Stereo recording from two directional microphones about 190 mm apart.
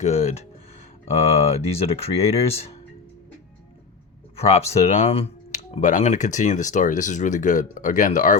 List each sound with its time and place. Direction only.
0.0 s speech: 35° left (ahead or behind)
4.4 s speech: 35° left (ahead or behind)